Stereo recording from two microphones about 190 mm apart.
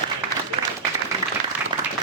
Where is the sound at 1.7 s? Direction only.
25° right (ahead or behind).